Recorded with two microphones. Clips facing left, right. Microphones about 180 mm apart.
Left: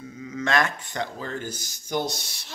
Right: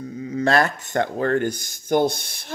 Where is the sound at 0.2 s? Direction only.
35° right (ahead or behind).